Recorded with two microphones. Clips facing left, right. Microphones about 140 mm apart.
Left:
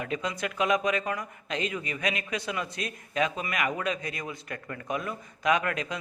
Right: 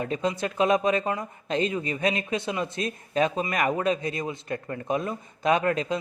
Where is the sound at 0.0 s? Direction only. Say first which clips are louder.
Right 4 dB; 30° right (ahead or behind).